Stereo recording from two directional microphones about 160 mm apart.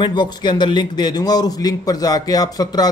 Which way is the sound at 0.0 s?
30° left (ahead or behind).